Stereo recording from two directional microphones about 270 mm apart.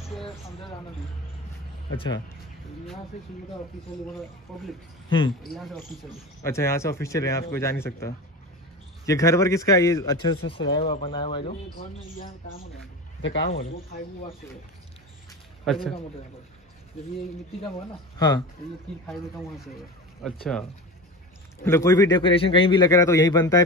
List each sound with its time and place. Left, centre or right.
0.2 s speech: centre
2.0 s a man's voice: centre
4.5 s a man's voice: centre
13.2 s speech: left
13.6 s speech: left
15.6 s speech: centre
17.7 s a man's voice: centre
19.0 s speech: centre
21.6 s a man's voice: centre